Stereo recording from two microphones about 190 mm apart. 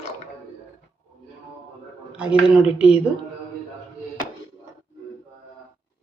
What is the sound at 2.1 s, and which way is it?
Speech, 5° right (ahead or behind).